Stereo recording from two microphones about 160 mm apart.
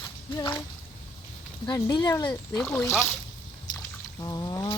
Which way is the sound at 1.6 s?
25° left (ahead or behind).